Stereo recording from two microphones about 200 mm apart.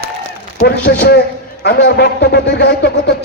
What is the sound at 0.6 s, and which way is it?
A man's voice, 55° left (ahead or behind).